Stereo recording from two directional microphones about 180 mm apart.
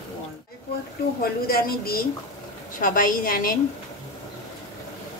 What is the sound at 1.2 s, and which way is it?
A woman's voice, 55° left (ahead or behind).